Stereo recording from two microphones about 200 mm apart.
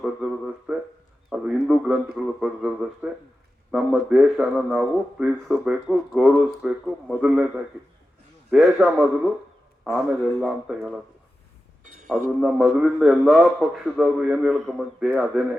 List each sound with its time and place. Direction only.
0.0 s a sound: 5° right (ahead or behind)
2.1 s a man's voice: 5° right (ahead or behind)
11.8 s music: 40° right (ahead or behind)
12.4 s a man's voice: centre (ahead or behind)